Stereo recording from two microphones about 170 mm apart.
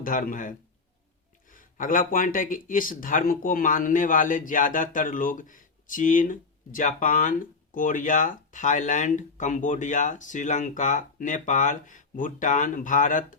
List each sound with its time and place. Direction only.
0.0 s speech: 55° left (ahead or behind)